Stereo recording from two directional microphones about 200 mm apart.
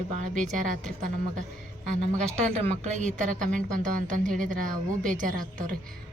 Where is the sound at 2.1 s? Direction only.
35° right (ahead or behind).